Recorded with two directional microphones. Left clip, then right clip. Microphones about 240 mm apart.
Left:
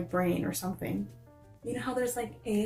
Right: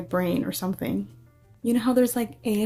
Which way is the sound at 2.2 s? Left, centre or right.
Right.